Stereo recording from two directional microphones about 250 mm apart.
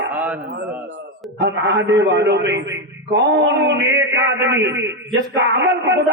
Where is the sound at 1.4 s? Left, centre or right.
Right.